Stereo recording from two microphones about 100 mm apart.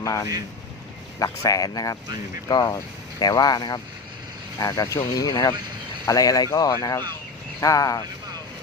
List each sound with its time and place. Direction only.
0.0 s speech: 35° left (ahead or behind)
5.5 s vehicle: 50° right (ahead or behind)
6.1 s speech: 35° left (ahead or behind)